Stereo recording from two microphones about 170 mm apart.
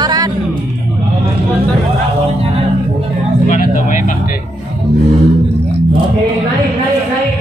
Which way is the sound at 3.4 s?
50° left (ahead or behind).